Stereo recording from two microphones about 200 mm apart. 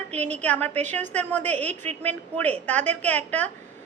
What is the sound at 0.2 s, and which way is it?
A woman's voice, 10° left (ahead or behind).